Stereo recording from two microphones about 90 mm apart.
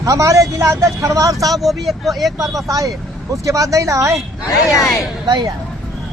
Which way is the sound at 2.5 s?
40° right (ahead or behind).